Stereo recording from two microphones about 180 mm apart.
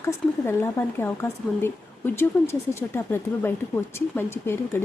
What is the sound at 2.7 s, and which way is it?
A woman's voice, 15° left (ahead or behind).